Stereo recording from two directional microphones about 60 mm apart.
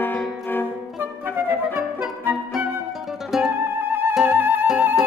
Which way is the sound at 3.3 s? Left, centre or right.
Centre.